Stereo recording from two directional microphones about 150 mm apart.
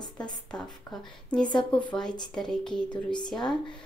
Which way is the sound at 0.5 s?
5° left (ahead or behind).